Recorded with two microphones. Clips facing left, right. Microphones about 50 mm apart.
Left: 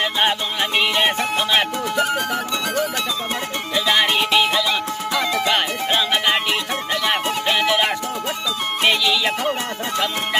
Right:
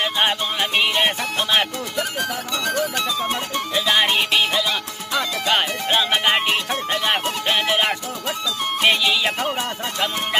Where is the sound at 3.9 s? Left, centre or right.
Centre.